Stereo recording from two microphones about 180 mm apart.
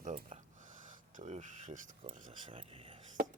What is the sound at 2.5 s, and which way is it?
Speech, 30° right (ahead or behind).